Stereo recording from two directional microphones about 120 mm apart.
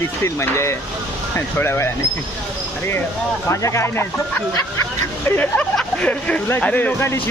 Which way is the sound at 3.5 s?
25° left (ahead or behind).